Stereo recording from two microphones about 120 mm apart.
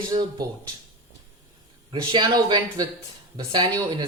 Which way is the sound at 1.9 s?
40° right (ahead or behind).